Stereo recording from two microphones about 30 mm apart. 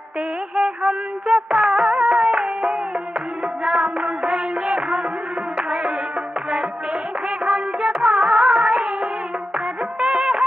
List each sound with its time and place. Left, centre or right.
0.6 s music of bollywood: centre
3.6 s music: right
4.3 s music of bollywood: right
7.4 s music of bollywood: right
9.9 s music of bollywood: right